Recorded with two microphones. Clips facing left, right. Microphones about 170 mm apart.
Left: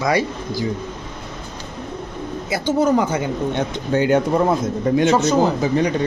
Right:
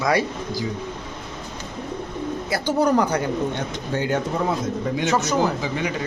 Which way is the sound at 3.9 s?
60° left (ahead or behind).